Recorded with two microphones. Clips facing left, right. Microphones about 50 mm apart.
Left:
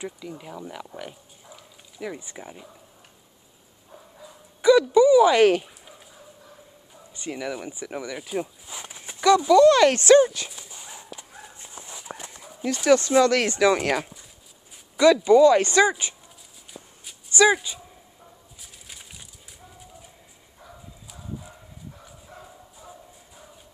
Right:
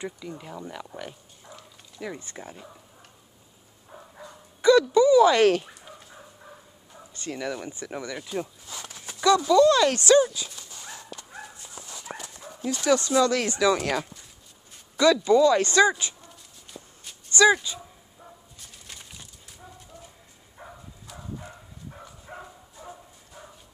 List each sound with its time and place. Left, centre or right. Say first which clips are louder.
0.0 s speech: even; centre
4.2 s dog: left 2 dB; centre
7.2 s speech: left 1 dB; centre; by 10.5 s left
10.5 s dog: even; centre
12.7 s speech: left 4 dB; left
15.1 s speech: left 4 dB; left
17.3 s dog: even; left
18.6 s a sound: left 1 dB; centre
20.6 s a sound: right 3 dB; right
22.3 s dog: right 5 dB; right
22.8 s bow-wow: right 4 dB; right